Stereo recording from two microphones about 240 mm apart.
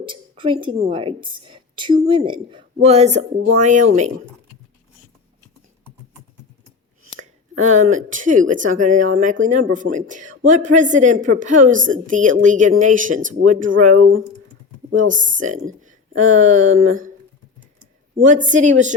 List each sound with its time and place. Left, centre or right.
0.0 s a woman's voice: right
7.6 s speech: right
13.8 s speech: right
15.0 s speech: right
16.8 s speech: right
18.3 s speech: right